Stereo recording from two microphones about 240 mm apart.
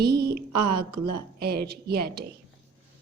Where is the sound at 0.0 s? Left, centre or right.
Right.